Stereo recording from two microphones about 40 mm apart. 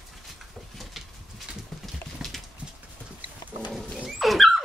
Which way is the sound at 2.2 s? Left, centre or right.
Centre.